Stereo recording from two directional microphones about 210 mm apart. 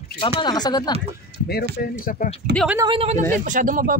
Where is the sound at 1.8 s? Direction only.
40° left (ahead or behind).